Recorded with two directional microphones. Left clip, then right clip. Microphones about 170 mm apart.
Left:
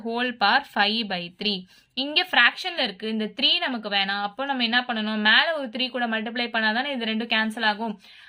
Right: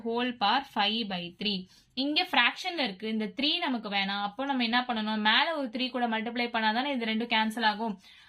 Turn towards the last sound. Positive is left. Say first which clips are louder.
# left 4 dB
turn(degrees=35)  # may be behind; listen again after turning